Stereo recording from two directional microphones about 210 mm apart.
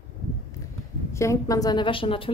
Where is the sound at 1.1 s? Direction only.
15° left (ahead or behind).